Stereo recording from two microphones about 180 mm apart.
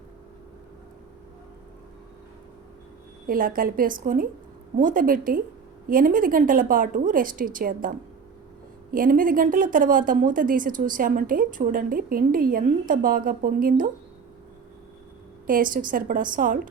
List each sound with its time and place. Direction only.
3.2 s speech: 50° right (ahead or behind)
15.4 s speech: 50° right (ahead or behind)